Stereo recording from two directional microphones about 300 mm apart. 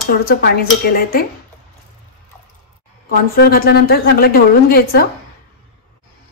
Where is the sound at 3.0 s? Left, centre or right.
Left.